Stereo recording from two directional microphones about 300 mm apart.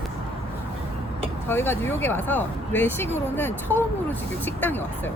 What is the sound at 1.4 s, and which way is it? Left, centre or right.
Speech, centre.